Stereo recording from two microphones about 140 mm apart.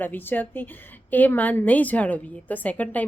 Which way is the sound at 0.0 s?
15° left (ahead or behind).